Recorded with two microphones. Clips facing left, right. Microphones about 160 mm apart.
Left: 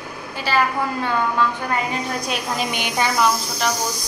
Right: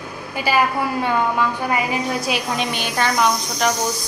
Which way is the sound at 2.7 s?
15° left (ahead or behind).